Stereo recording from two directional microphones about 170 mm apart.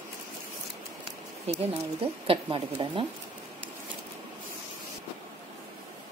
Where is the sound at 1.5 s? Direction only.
35° right (ahead or behind).